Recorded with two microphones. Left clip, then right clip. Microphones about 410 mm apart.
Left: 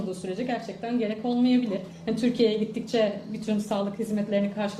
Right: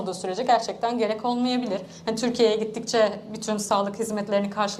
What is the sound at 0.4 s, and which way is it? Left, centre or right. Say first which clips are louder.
A woman's voice: right 13 dB; right.